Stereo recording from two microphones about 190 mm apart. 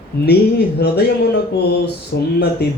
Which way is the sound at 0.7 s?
55° left (ahead or behind).